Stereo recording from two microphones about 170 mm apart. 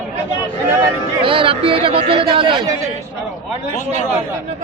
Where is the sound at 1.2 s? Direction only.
30° right (ahead or behind).